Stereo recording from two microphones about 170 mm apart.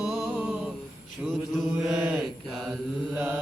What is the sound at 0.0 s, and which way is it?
Music, centre (ahead or behind).